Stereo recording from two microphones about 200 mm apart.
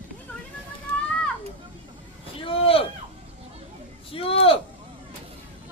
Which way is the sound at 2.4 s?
30° left (ahead or behind).